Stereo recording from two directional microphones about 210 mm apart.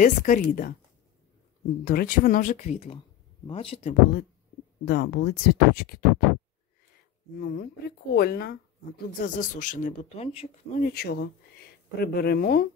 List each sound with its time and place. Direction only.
0.0 s speech: 40° left (ahead or behind)
1.9 s speech: 40° left (ahead or behind)
4.8 s speech: 50° left (ahead or behind)
7.3 s speech: 45° left (ahead or behind); by 10.8 s 30° left (ahead or behind)
10.8 s speech: 45° left (ahead or behind)